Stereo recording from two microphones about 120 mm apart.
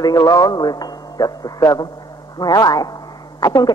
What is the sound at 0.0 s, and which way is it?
A man's voice, 30° left (ahead or behind).